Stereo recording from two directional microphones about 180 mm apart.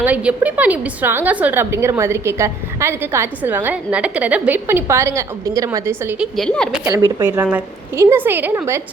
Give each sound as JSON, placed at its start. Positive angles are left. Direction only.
{"t": 0.0, "sound": "a woman's voice", "side_deg": -10}
{"t": 6.3, "sound": "a woman's voice", "side_deg": 5}
{"t": 6.8, "sound": "speech", "side_deg": -20}
{"t": 7.3, "sound": "a woman's voice", "side_deg": -10}